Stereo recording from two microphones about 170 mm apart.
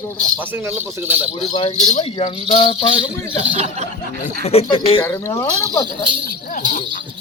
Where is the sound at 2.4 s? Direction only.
30° left (ahead or behind).